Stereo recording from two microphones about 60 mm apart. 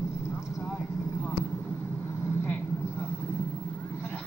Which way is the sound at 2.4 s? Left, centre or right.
Left.